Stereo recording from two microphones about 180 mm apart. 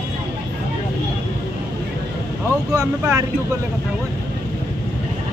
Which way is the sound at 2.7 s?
15° right (ahead or behind).